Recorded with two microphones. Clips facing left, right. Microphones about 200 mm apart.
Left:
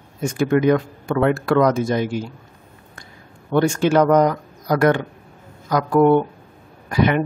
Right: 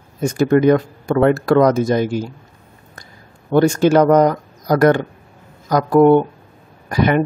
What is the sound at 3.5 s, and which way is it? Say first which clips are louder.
Speech: right 4 dB; 40° right (ahead or behind).